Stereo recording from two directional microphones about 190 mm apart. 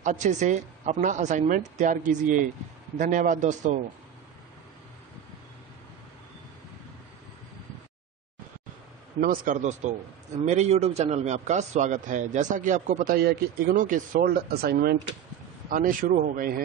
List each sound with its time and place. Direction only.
0.0 s a man's voice: 40° right (ahead or behind)
9.2 s a man's voice: 45° right (ahead or behind)
13.1 s speech: 55° right (ahead or behind)
15.7 s speech: 45° right (ahead or behind)